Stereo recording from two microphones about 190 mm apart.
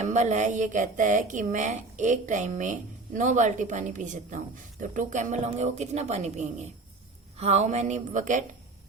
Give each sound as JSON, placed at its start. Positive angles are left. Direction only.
{"t": 0.0, "sound": "speech", "side_deg": -40}